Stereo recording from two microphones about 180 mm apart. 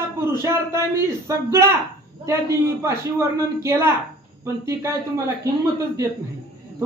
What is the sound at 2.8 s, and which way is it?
A woman's voice, 15° right (ahead or behind).